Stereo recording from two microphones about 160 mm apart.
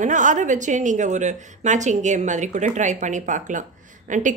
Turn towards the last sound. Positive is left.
turn(degrees=-50)  # may be behind; listen again after turning